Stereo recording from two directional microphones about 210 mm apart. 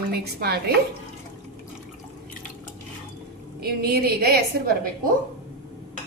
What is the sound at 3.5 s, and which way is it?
Speech, 45° right (ahead or behind).